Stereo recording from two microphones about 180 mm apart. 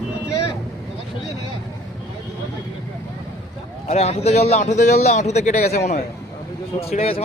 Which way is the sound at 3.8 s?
35° left (ahead or behind).